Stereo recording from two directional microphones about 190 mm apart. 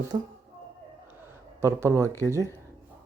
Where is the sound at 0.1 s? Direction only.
20° right (ahead or behind).